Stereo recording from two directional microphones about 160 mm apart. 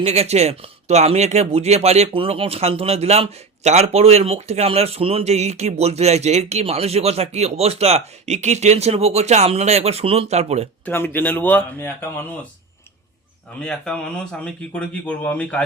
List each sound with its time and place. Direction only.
0.0 s speech: 40° right (ahead or behind)
10.8 s speech: 10° left (ahead or behind)
13.6 s speech: 5° left (ahead or behind)